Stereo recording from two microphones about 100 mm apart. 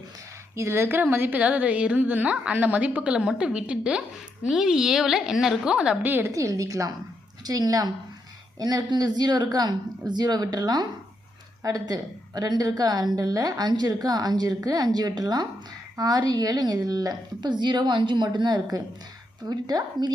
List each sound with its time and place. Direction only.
0.5 s a woman's voice: 25° right (ahead or behind)
6.3 s a woman's voice: 30° right (ahead or behind)